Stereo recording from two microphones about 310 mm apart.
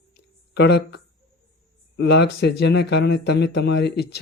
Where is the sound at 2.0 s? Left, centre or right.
Left.